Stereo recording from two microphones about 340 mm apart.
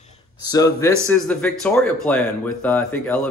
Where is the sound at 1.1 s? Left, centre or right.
Centre.